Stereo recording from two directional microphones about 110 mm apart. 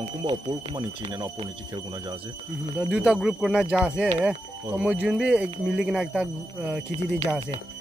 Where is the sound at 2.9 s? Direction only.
10° right (ahead or behind).